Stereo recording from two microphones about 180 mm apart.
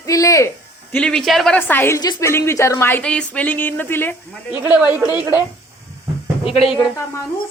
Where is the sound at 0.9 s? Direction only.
5° left (ahead or behind).